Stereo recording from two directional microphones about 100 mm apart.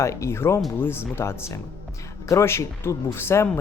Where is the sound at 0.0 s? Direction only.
30° left (ahead or behind).